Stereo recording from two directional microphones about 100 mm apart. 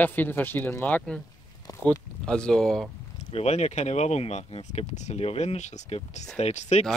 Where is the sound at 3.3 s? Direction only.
90° left.